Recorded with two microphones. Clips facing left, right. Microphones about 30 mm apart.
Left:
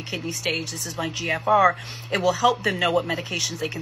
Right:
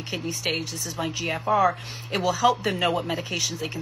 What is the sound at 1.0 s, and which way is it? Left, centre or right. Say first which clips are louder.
Speech: left 2 dB; centre.